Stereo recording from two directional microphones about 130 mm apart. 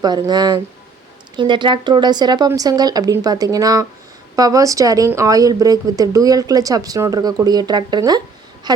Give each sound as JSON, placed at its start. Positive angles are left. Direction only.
{"t": 0.0, "sound": "speech", "side_deg": -30}